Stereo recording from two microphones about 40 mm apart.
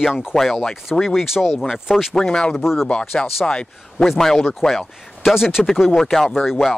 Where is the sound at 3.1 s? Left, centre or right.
Left.